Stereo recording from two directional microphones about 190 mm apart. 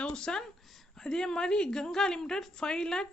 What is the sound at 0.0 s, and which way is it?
A woman's voice, 5° left (ahead or behind).